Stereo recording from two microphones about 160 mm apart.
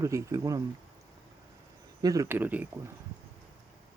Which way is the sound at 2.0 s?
20° right (ahead or behind).